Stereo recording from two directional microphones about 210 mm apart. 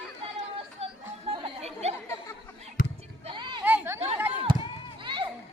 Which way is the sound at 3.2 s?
20° right (ahead or behind).